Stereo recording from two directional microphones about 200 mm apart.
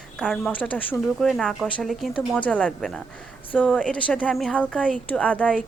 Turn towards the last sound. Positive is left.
turn(degrees=5)  # may be behind; listen again after turning